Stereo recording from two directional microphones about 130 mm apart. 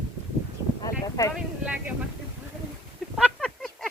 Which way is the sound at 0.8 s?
25° left (ahead or behind).